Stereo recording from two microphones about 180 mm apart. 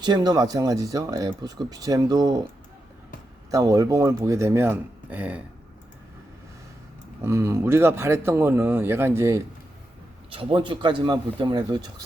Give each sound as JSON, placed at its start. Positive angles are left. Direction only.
{"t": 0.0, "sound": "speech", "side_deg": -25}
{"t": 3.5, "sound": "speech", "side_deg": -20}
{"t": 7.2, "sound": "speech", "side_deg": -15}
{"t": 10.3, "sound": "speech", "side_deg": -30}